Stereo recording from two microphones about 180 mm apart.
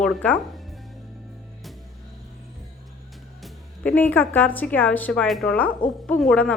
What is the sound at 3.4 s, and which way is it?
A woman's voice, 5° left (ahead or behind).